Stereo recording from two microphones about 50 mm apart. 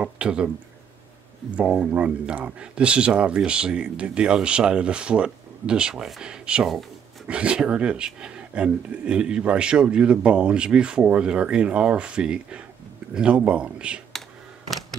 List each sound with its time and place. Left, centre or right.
0.0 s speech: right
1.6 s speech: right
6.6 s speech: centre
7.2 s speech: right